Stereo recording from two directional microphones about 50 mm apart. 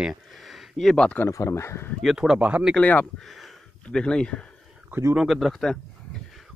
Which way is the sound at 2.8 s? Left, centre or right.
Left.